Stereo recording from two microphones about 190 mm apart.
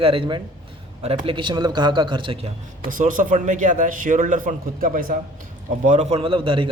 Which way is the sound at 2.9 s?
45° right (ahead or behind).